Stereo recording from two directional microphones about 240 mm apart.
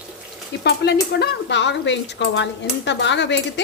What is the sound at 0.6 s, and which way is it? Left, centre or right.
Speech, left.